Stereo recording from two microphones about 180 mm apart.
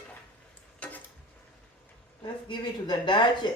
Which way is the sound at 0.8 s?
10° left (ahead or behind).